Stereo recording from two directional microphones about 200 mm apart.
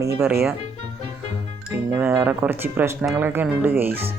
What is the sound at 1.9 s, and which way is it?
Speech, 10° right (ahead or behind).